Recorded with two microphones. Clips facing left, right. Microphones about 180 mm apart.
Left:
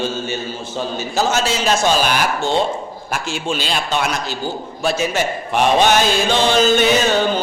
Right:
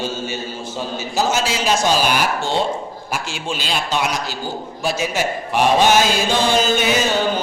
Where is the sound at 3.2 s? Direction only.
50° left (ahead or behind).